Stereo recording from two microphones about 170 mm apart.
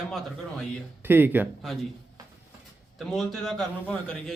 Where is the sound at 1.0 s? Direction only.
10° right (ahead or behind).